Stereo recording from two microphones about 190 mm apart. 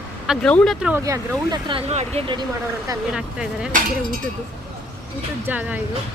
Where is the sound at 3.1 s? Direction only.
5° right (ahead or behind).